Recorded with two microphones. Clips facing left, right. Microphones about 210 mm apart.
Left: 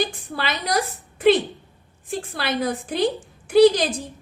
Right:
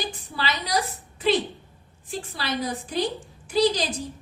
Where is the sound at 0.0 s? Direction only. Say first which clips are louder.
Left 5 dB; 55° left (ahead or behind).